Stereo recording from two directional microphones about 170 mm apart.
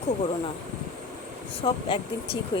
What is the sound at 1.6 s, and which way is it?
Speech, 30° left (ahead or behind).